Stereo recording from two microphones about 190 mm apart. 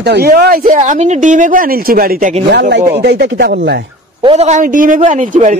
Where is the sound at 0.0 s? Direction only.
55° right (ahead or behind).